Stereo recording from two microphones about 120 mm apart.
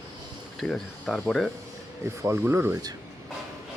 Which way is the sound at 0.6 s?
5° left (ahead or behind).